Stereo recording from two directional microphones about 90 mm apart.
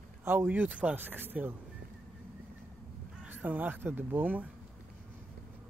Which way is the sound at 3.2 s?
20° right (ahead or behind).